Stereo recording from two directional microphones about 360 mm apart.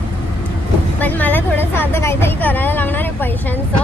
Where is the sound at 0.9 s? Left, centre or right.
Centre.